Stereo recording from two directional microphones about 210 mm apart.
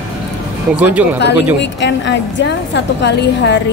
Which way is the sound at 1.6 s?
55° left (ahead or behind).